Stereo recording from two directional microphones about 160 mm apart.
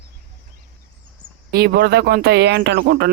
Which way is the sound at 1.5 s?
90° right.